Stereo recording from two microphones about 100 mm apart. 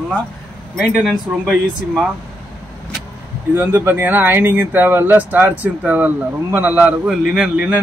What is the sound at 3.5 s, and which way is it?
Speech, 20° right (ahead or behind).